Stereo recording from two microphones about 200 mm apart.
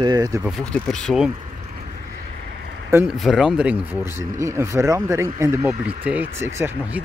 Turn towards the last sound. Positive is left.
turn(degrees=-15)  # may be behind; listen again after turning